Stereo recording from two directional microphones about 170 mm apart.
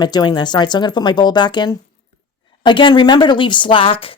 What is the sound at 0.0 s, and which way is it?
A woman's voice, 25° left (ahead or behind).